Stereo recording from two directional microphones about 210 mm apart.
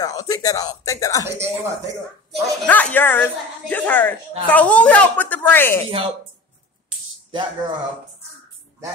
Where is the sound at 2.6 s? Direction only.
5° left (ahead or behind).